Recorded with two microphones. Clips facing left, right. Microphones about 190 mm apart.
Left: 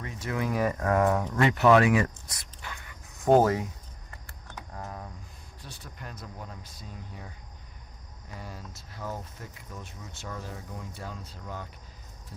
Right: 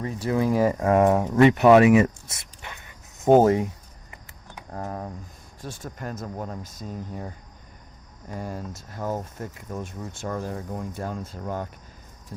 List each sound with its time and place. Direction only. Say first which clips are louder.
0.0 s speech: right 8 dB; 35° right (ahead or behind)
4.7 s speech: right 9 dB; 45° right (ahead or behind)